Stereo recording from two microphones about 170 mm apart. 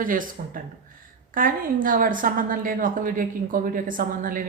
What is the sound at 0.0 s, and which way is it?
A woman's voice, 55° right (ahead or behind).